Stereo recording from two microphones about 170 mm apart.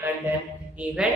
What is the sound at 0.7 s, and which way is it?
Speech, 5° right (ahead or behind).